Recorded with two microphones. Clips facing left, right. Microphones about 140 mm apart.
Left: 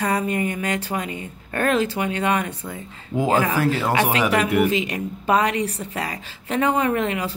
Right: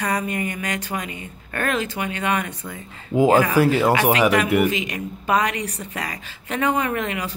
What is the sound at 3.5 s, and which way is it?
Speech, 10° right (ahead or behind).